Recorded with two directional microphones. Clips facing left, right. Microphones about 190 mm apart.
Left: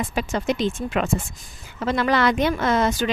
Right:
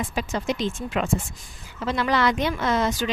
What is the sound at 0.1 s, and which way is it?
A woman's voice, 60° left (ahead or behind).